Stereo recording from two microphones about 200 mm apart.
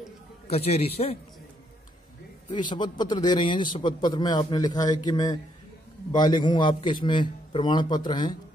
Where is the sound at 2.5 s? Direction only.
25° left (ahead or behind).